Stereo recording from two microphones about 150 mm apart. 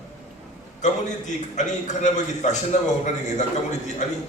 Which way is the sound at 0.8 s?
55° left (ahead or behind).